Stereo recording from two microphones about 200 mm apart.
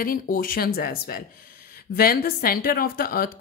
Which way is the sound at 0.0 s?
45° left (ahead or behind).